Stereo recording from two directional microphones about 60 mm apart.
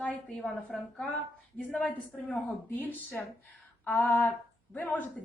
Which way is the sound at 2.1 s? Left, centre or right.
Centre.